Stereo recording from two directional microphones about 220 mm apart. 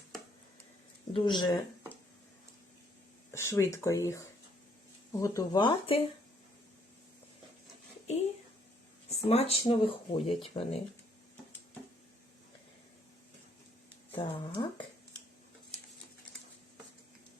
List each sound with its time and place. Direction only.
1.1 s speech: 20° left (ahead or behind)
3.3 s speech: 10° left (ahead or behind)
5.2 s speech: 15° left (ahead or behind)
8.0 s a sound: 30° left (ahead or behind)
9.0 s speech: 30° left (ahead or behind)
14.2 s speech: 20° left (ahead or behind)